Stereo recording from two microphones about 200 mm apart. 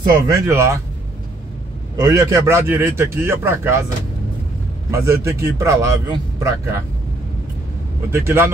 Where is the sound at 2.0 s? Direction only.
15° right (ahead or behind).